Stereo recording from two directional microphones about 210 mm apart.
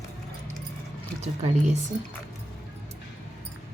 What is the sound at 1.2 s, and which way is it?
Speech, 35° right (ahead or behind).